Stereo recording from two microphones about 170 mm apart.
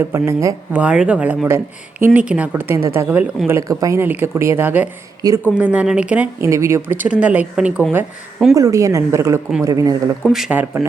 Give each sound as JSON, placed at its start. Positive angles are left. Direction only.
{"t": 0.0, "sound": "speech", "side_deg": -15}
{"t": 5.5, "sound": "speech", "side_deg": -10}
{"t": 8.5, "sound": "a woman's voice", "side_deg": -20}
{"t": 10.2, "sound": "speech", "side_deg": 0}